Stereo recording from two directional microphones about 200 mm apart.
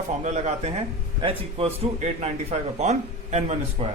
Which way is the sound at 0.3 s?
35° right (ahead or behind).